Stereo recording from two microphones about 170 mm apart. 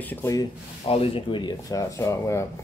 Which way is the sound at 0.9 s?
35° left (ahead or behind).